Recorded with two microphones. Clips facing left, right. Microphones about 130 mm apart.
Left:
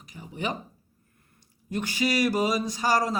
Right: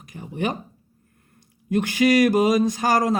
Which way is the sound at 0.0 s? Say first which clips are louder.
Right 6 dB; 50° right (ahead or behind).